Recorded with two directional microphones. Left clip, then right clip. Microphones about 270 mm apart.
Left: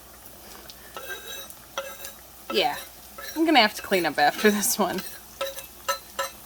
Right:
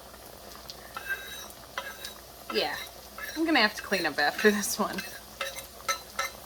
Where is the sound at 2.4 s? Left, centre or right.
Left.